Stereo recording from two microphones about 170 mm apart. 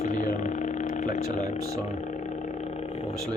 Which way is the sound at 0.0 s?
45° left (ahead or behind).